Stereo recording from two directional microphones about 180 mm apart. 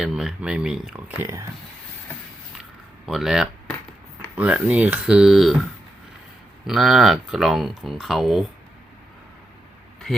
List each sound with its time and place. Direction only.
0.0 s speech: centre (ahead or behind)
3.1 s speech: centre (ahead or behind)
6.7 s speech: centre (ahead or behind)